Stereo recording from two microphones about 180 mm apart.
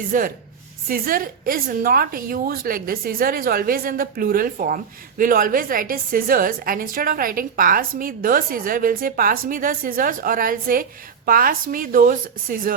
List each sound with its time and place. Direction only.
0.1 s a woman's voice: 50° right (ahead or behind)